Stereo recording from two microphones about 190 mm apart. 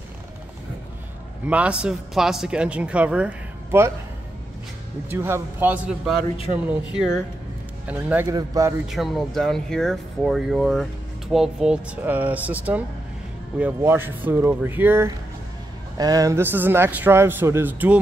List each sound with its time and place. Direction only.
1.5 s a man's voice: 5° right (ahead or behind)
5.1 s speech: 10° right (ahead or behind)
7.8 s a man's voice: 10° right (ahead or behind)
8.8 s a man's voice: centre (ahead or behind)